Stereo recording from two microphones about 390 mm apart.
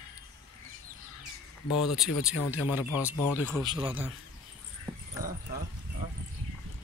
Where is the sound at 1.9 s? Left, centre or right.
Left.